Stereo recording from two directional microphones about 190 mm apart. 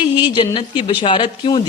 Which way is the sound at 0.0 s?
25° left (ahead or behind).